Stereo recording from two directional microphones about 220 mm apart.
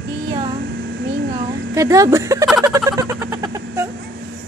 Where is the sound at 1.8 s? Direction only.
15° right (ahead or behind).